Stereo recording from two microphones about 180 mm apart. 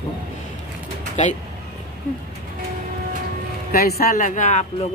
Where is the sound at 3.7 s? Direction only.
55° left (ahead or behind).